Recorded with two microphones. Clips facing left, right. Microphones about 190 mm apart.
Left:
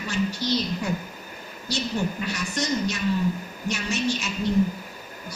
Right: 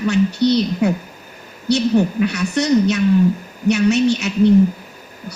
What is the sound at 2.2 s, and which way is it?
A woman's voice, 65° right (ahead or behind).